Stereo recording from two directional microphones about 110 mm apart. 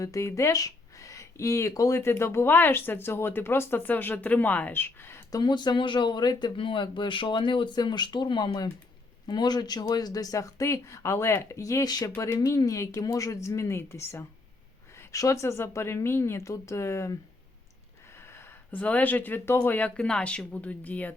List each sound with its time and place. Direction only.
0.0 s speech: 30° left (ahead or behind)
5.3 s speech: 40° left (ahead or behind)
12.1 s speech: 25° left (ahead or behind)
18.2 s speech: 25° left (ahead or behind)